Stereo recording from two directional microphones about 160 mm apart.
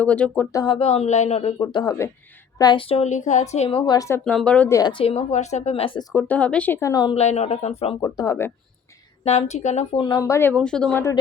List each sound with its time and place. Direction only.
0.0 s speech: 10° left (ahead or behind)
0.5 s a woman's voice: 30° left (ahead or behind)
4.3 s speech: 5° left (ahead or behind)
4.7 s a woman's voice: 25° left (ahead or behind)
6.1 s speech: 10° left (ahead or behind); by 7.2 s 25° left (ahead or behind)
7.2 s a woman's voice: 40° left (ahead or behind)
8.0 s speech: 20° left (ahead or behind)
9.2 s a woman's voice: 45° left (ahead or behind)
10.0 s speech: 25° left (ahead or behind)
10.5 s speech: 5° left (ahead or behind)